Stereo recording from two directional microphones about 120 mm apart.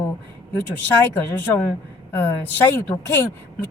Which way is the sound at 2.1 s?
15° left (ahead or behind).